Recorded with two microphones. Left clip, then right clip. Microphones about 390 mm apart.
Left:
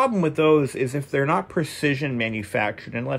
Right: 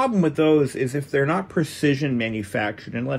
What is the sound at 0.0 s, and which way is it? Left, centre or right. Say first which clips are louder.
Speech: even; centre.